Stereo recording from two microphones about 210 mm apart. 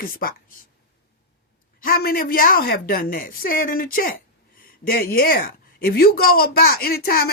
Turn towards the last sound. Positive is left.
turn(degrees=45)  # may be behind; listen again after turning